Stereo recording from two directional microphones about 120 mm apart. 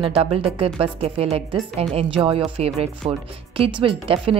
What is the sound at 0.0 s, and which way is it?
A woman's voice, 55° right (ahead or behind).